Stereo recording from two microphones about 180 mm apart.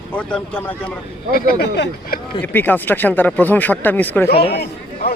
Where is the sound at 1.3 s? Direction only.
55° left (ahead or behind); by 2.1 s 75° left (ahead or behind).